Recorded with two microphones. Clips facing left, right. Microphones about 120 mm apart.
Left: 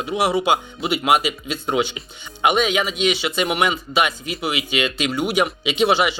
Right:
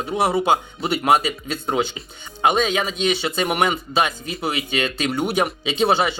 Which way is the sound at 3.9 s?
30° right (ahead or behind).